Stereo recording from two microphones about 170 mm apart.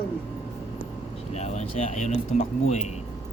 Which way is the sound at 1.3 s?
40° left (ahead or behind).